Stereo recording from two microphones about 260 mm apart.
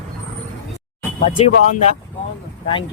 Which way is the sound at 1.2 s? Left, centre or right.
Left.